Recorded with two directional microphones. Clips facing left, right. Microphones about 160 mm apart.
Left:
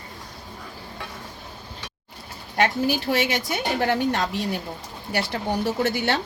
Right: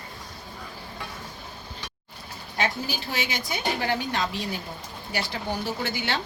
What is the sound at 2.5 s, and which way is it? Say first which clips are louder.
A woman's voice: left 7 dB; 65° left (ahead or behind).